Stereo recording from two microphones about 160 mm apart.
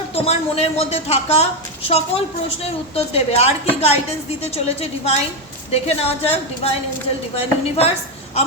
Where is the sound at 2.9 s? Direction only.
40° left (ahead or behind).